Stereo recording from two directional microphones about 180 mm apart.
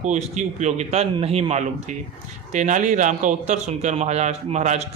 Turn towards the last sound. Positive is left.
turn(degrees=-40)  # may be behind; listen again after turning